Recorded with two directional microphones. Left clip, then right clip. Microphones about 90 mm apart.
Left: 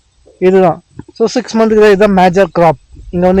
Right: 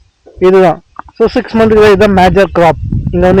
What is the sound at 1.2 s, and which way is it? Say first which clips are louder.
Speech: right 2 dB; 20° left (ahead or behind).